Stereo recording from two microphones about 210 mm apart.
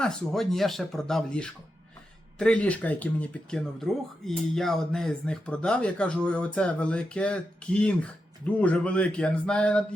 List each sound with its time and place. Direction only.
0.0 s speech: centre (ahead or behind)